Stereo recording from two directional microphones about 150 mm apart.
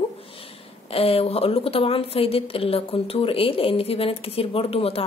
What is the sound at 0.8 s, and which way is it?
A woman's voice, 40° left (ahead or behind).